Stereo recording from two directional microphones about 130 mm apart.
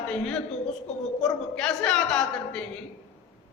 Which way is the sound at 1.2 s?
5° left (ahead or behind).